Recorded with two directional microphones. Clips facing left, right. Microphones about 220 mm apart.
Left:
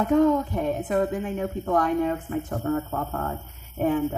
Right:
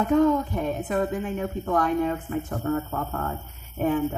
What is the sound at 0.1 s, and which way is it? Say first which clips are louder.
A woman's voice: left 1 dB; 30° left (ahead or behind).